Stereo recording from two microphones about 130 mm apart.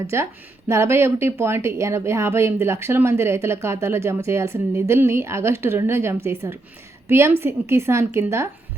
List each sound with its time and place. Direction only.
0.1 s speech: 20° right (ahead or behind)